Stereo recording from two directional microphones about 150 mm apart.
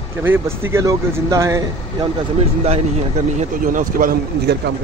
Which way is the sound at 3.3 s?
60° right (ahead or behind).